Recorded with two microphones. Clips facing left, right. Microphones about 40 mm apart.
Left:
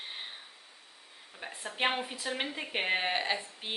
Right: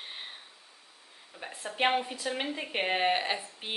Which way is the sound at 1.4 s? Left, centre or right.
Centre.